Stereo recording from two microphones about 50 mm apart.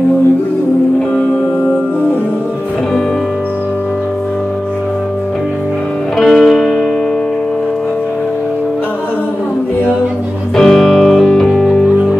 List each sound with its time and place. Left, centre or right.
6.1 s music: centre
10.5 s music: centre